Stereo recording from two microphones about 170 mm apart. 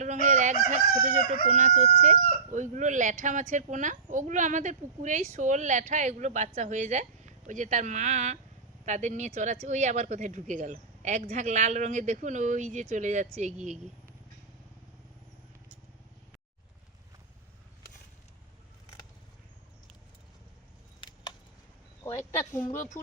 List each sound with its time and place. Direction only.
0.0 s speech: 45° right (ahead or behind)
22.0 s speech: 15° left (ahead or behind)
22.7 s speech: 50° left (ahead or behind)